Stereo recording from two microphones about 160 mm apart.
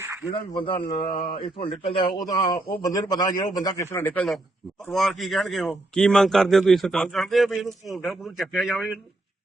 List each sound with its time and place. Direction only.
0.0 s a sound: 15° right (ahead or behind)
0.3 s speech: 30° left (ahead or behind)
2.3 s a man's voice: 20° left (ahead or behind); by 8.7 s centre (ahead or behind)